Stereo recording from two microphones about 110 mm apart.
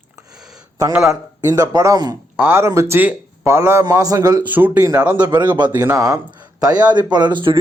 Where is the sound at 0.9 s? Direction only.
5° right (ahead or behind).